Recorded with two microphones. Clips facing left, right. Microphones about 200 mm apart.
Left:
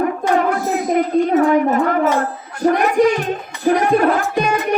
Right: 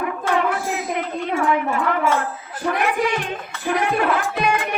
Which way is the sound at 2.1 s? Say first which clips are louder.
Left 4 dB; 45° left (ahead or behind).